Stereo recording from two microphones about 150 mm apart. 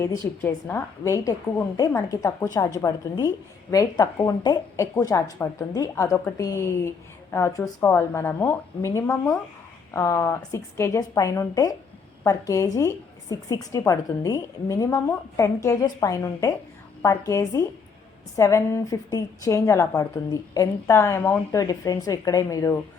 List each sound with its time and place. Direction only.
0.0 s a woman's voice: 15° left (ahead or behind)
21.5 s a woman's voice: 25° left (ahead or behind)